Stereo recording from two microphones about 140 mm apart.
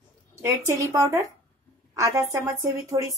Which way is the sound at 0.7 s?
20° right (ahead or behind).